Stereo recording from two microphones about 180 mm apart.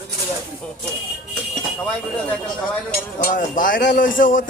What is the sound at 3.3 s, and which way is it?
Speech, 45° left (ahead or behind).